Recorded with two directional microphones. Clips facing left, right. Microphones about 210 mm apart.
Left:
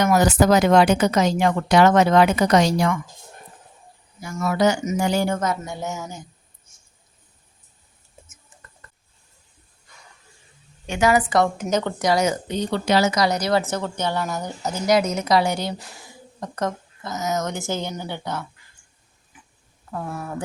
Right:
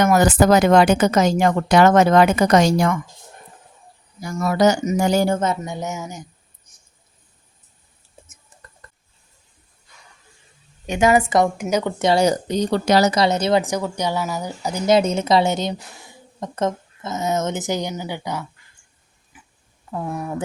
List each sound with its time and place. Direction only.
0.0 s a woman's voice: 50° right (ahead or behind)
4.2 s speech: 35° right (ahead or behind)
5.4 s a woman's voice: 20° right (ahead or behind)
8.8 s a sound: 35° right (ahead or behind)
10.8 s a woman's voice: 20° right (ahead or behind)
11.6 s a woman's voice: 10° right (ahead or behind)
11.9 s speech: 30° right (ahead or behind)
13.1 s a woman's voice: 25° right (ahead or behind)
14.8 s a woman's voice: 25° right (ahead or behind); by 18.4 s 10° right (ahead or behind)
19.3 s oink: 5° right (ahead or behind)
19.9 s a woman's voice: 15° right (ahead or behind)